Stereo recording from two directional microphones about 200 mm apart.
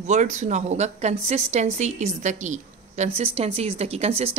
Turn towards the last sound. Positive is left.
turn(degrees=-30)  # may be behind; listen again after turning